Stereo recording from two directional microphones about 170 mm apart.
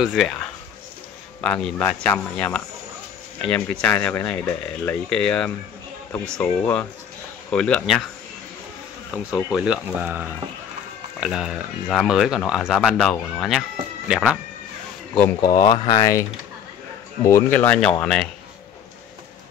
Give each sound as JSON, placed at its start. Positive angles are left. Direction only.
{"t": 0.0, "sound": "speech", "side_deg": 0}
{"t": 9.1, "sound": "speech", "side_deg": -10}
{"t": 15.4, "sound": "speech", "side_deg": 20}